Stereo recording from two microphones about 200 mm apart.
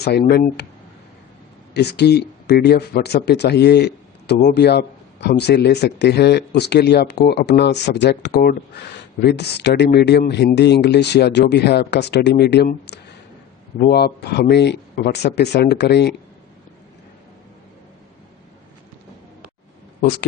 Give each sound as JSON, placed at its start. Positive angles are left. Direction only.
{"t": 0.0, "sound": "speech", "side_deg": 55}
{"t": 1.7, "sound": "speech", "side_deg": 55}